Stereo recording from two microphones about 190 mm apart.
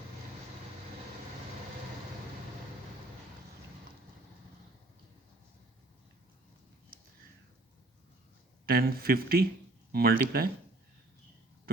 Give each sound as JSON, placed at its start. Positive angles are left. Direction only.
{"t": 8.6, "sound": "speech", "side_deg": -50}